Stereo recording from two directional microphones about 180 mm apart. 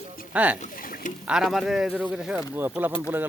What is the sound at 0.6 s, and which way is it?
Boat, 50° left (ahead or behind).